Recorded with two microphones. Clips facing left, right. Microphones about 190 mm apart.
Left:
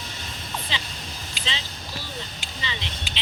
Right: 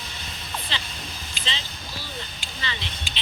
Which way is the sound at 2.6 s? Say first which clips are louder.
Even; 15° left (ahead or behind).